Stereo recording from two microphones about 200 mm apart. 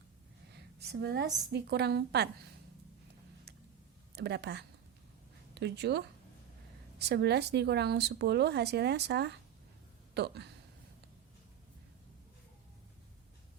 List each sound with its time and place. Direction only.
0.5 s a sound: 55° right (ahead or behind)
1.5 s speech: 55° right (ahead or behind)
4.1 s speech: 55° right (ahead or behind)
7.0 s speech: 55° right (ahead or behind)